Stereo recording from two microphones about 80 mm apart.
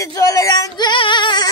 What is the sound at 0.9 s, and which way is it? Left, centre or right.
Music, left.